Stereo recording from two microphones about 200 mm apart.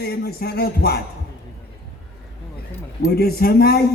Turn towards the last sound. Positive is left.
turn(degrees=50)  # may be behind; listen again after turning